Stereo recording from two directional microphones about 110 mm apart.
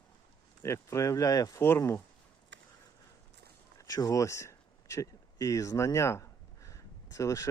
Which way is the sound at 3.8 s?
35° left (ahead or behind).